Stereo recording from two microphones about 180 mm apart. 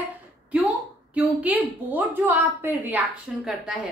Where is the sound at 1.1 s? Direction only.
10° right (ahead or behind).